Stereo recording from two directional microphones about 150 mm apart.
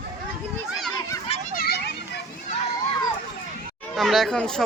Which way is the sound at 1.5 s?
85° left.